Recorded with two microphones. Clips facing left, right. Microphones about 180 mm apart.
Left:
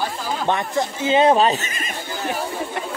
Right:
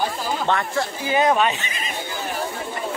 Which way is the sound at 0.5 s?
20° left (ahead or behind).